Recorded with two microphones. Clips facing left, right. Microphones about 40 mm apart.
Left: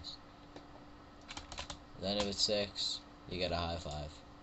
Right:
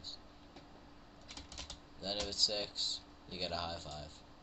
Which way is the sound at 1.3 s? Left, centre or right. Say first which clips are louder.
Left 4 dB; left.